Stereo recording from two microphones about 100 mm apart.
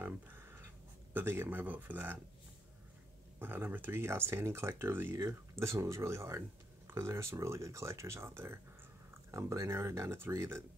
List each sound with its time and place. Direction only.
0.0 s a sound: 20° right (ahead or behind)
1.1 s speech: 20° right (ahead or behind)
3.3 s speech: 20° right (ahead or behind)